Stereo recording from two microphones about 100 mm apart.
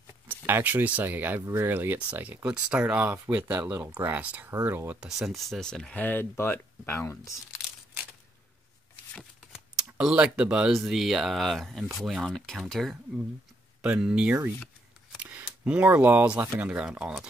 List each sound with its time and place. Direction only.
0.5 s speech: 20° right (ahead or behind)
5.0 s speech: 5° right (ahead or behind)
5.9 s speech: 20° left (ahead or behind)
9.5 s speech: 5° right (ahead or behind)
13.8 s speech: 10° right (ahead or behind)